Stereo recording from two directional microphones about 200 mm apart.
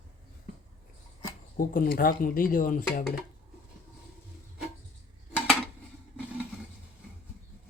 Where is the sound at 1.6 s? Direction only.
45° left (ahead or behind).